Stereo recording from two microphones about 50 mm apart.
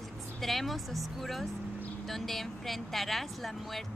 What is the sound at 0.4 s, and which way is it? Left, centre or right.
Speech, centre.